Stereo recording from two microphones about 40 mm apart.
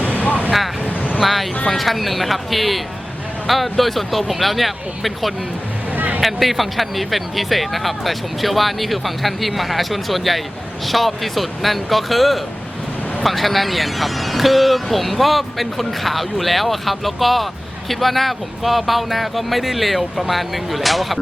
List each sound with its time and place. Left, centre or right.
0.9 s vehicle: left
1.2 s speech: centre